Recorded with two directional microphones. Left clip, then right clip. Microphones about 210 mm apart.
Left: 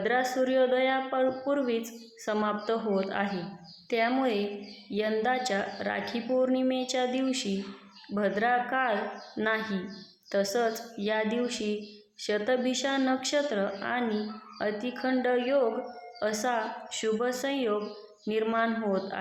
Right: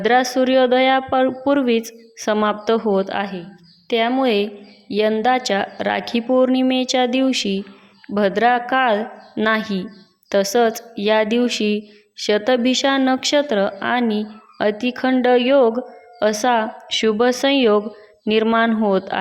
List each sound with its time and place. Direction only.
0.0 s a woman's voice: 40° right (ahead or behind)